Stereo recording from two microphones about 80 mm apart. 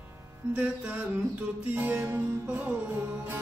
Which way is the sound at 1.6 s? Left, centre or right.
Right.